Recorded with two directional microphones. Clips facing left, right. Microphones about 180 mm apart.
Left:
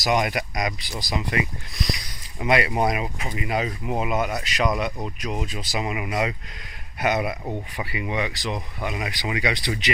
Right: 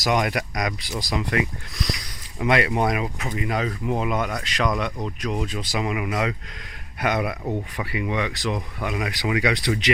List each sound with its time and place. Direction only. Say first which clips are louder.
0.0 s speech: even; 5° left (ahead or behind)
2.4 s speech: right 1 dB; 5° left (ahead or behind)